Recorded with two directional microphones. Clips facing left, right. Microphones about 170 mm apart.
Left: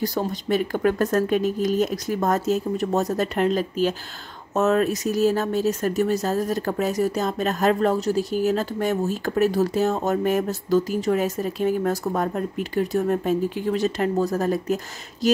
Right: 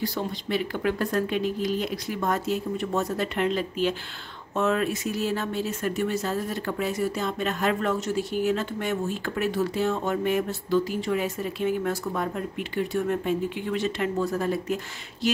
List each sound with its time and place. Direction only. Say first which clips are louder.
0.0 s speech: left 4 dB; 45° left (ahead or behind)